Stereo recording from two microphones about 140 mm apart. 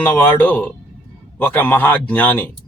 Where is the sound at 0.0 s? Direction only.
15° left (ahead or behind).